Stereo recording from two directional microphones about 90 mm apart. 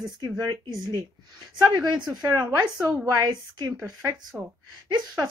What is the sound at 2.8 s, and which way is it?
Speech, 10° right (ahead or behind).